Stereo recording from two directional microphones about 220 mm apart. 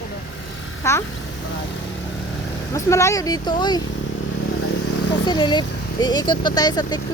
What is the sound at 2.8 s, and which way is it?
Speech, 15° left (ahead or behind).